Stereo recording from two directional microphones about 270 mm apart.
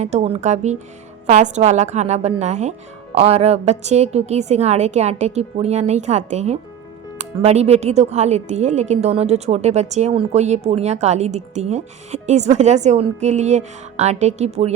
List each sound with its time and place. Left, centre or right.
0.0 s a woman's voice: right